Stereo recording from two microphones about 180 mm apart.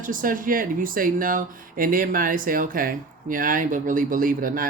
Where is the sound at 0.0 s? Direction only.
50° right (ahead or behind).